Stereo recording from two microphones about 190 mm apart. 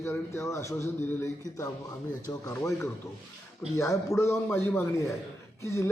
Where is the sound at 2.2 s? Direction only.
15° left (ahead or behind).